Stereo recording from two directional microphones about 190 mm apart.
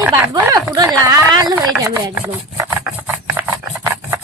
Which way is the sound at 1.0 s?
20° right (ahead or behind).